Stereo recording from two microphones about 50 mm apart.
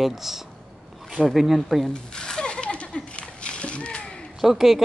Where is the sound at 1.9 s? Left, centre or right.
Centre.